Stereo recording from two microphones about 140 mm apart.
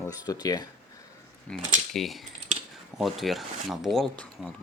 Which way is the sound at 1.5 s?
Centre (ahead or behind).